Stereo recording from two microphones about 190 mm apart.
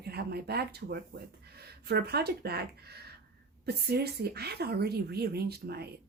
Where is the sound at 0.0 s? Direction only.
55° right (ahead or behind).